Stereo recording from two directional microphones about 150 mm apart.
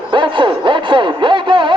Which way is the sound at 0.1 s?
35° right (ahead or behind).